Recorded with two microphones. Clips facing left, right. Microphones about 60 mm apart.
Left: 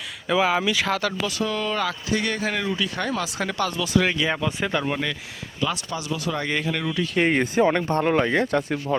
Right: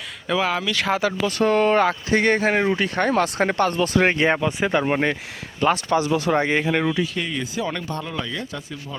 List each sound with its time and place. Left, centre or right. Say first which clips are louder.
0.3 s speech: left 1 dB; centre
0.9 s speech: right 3 dB; centre
1.3 s speech: right 8 dB; right
4.7 s speech: right 6 dB; right
5.5 s speech: right 8 dB; right
6.4 s speech: right 5 dB; right
7.3 s speech: left 7 dB; left